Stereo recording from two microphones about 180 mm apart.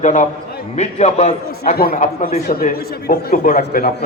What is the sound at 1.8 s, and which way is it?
Speech, 55° left (ahead or behind).